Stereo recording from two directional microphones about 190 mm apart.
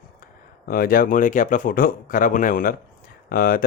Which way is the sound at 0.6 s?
50° left (ahead or behind).